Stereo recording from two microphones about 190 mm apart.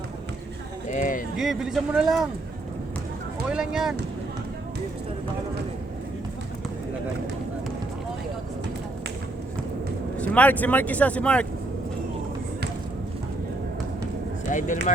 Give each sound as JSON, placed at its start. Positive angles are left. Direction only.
{"t": 0.9, "sound": "speech", "side_deg": 45}
{"t": 1.4, "sound": "a man's voice", "side_deg": 0}
{"t": 3.5, "sound": "a man's voice", "side_deg": -5}
{"t": 10.2, "sound": "speech", "side_deg": 5}
{"t": 14.5, "sound": "speech", "side_deg": 40}